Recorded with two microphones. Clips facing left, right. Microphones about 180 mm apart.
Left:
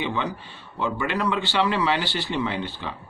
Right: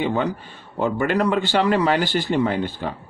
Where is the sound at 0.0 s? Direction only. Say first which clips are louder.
Right 5 dB; 45° right (ahead or behind).